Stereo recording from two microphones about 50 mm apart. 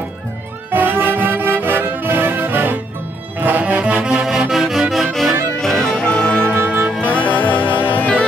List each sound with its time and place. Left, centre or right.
0.7 s music: right
4.0 s music: centre
4.9 s accordion: centre
5.6 s music: centre
6.0 s music: left
6.5 s music: right
7.1 s music: left